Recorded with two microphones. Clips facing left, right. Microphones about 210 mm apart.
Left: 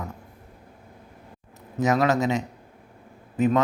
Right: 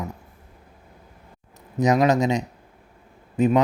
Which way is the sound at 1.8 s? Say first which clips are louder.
Right 3 dB; 20° right (ahead or behind).